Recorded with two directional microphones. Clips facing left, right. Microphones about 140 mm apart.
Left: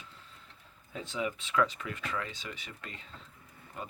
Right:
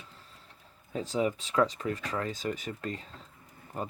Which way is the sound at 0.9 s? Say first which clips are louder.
Right 6 dB; 35° right (ahead or behind).